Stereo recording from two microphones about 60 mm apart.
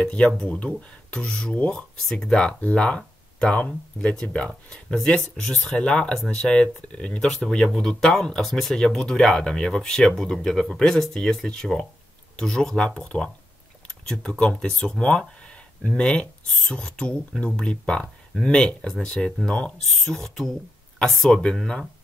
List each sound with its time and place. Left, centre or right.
0.0 s speech: centre
2.0 s speech: centre
19.9 s speech: centre